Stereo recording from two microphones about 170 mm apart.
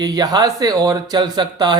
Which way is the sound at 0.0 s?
25° right (ahead or behind).